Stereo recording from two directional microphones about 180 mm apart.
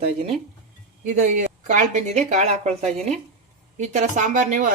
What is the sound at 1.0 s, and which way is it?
Speech, 40° right (ahead or behind).